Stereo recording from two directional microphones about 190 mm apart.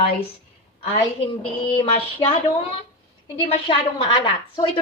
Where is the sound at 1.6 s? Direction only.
25° left (ahead or behind).